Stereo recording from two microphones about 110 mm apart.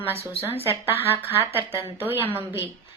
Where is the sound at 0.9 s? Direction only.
20° right (ahead or behind).